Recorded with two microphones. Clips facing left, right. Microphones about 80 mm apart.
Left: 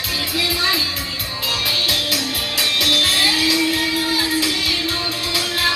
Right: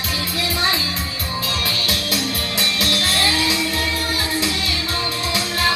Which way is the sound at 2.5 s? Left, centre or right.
Right.